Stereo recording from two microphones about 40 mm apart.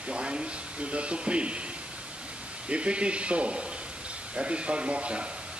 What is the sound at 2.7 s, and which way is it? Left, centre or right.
Speech, right.